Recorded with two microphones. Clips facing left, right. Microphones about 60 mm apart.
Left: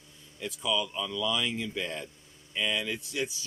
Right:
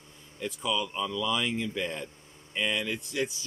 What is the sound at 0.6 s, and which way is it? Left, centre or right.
Speech, right.